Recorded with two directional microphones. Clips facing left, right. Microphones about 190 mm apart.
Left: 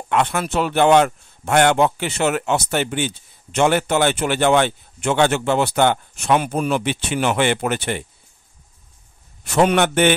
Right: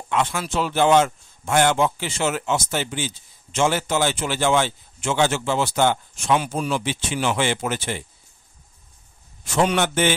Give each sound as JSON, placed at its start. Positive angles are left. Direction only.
{"t": 0.1, "sound": "a man's voice", "side_deg": 60}
{"t": 9.4, "sound": "a man's voice", "side_deg": 60}